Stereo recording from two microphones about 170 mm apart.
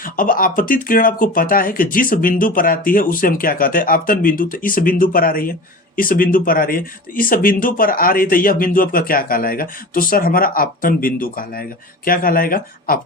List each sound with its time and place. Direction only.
0.0 s speech: 55° left (ahead or behind)